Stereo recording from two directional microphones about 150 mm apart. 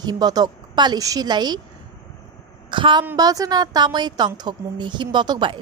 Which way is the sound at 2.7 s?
30° right (ahead or behind).